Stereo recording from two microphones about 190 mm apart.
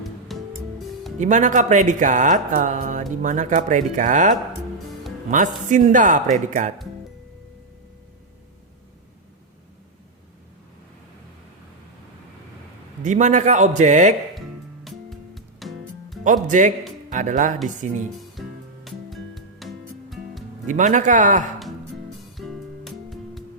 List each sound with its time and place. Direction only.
0.0 s music: centre (ahead or behind)
1.2 s speech: 40° right (ahead or behind)
13.0 s speech: 40° right (ahead or behind)
14.8 s music: centre (ahead or behind)
16.2 s speech: 40° right (ahead or behind)
18.9 s music: centre (ahead or behind)
20.7 s speech: 40° right (ahead or behind)
22.4 s music: centre (ahead or behind)